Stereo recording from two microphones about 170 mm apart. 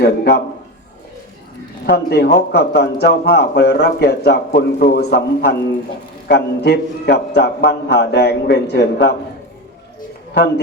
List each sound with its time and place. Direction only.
0.0 s a man's voice: 70° left (ahead or behind)
1.9 s a man's voice: 70° left (ahead or behind)